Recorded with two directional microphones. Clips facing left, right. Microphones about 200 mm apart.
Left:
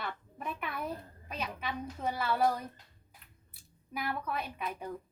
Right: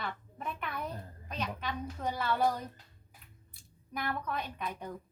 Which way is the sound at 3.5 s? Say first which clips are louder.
Even; 5° left (ahead or behind).